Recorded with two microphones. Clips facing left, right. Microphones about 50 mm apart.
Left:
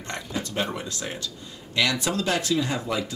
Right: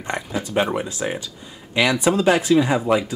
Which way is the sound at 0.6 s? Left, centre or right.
Centre.